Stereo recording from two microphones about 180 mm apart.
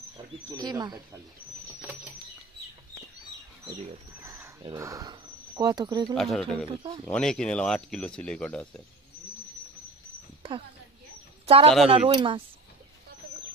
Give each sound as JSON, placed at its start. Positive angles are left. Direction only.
{"t": 0.5, "sound": "speech", "side_deg": -20}
{"t": 1.8, "sound": "bird flight", "side_deg": -10}
{"t": 3.6, "sound": "a sound", "side_deg": -20}
{"t": 4.7, "sound": "speech", "side_deg": -20}
{"t": 6.1, "sound": "speech", "side_deg": 0}
{"t": 6.7, "sound": "speech", "side_deg": -30}
{"t": 7.1, "sound": "speech", "side_deg": 5}
{"t": 11.4, "sound": "speech", "side_deg": -30}